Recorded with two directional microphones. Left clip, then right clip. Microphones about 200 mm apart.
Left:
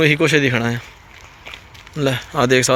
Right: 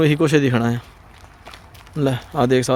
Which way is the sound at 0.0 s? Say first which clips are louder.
Left 2 dB; 20° right (ahead or behind).